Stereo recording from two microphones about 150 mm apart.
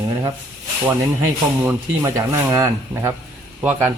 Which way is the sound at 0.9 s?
15° right (ahead or behind).